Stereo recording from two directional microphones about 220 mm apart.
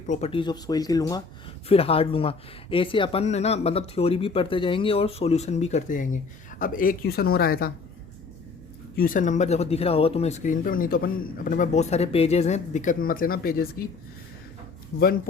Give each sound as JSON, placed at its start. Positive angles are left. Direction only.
{"t": 0.1, "sound": "speech", "side_deg": 25}
{"t": 1.6, "sound": "speech", "side_deg": 25}
{"t": 9.0, "sound": "speech", "side_deg": 35}